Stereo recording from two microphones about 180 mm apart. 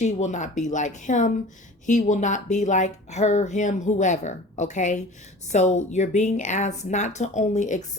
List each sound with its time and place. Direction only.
0.0 s a woman's voice: 40° left (ahead or behind)